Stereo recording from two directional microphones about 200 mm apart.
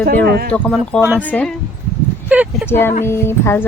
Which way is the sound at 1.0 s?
10° right (ahead or behind).